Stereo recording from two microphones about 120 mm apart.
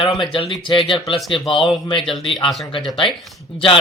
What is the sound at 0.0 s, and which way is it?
Speech, 45° left (ahead or behind).